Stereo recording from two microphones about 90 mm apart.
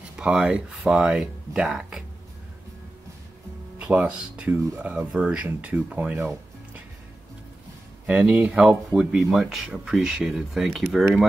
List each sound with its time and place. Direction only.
0.1 s speech: 10° right (ahead or behind)
3.7 s speech: 15° right (ahead or behind)
8.1 s speech: 15° right (ahead or behind)